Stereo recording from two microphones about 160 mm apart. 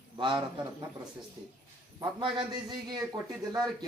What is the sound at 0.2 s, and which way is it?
Speech, 30° right (ahead or behind).